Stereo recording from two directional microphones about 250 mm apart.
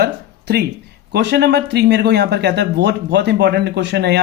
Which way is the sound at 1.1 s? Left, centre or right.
Right.